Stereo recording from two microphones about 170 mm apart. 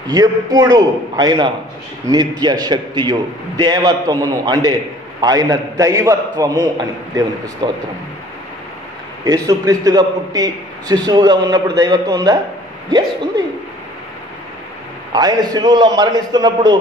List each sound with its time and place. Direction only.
0.1 s a man's voice: 25° right (ahead or behind)
9.2 s a man's voice: 20° right (ahead or behind)
15.1 s a man's voice: 25° right (ahead or behind)